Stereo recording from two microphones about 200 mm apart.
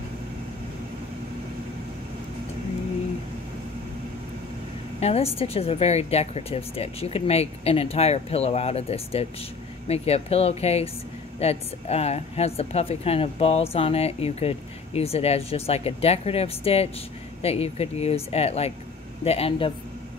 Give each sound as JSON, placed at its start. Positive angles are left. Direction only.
{"t": 5.0, "sound": "a woman's voice", "side_deg": 30}